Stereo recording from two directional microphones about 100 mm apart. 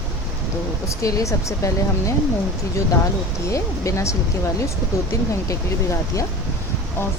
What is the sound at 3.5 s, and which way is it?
Speech, 30° left (ahead or behind).